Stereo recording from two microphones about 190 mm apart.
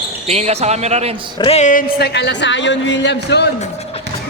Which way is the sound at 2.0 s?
65° left (ahead or behind).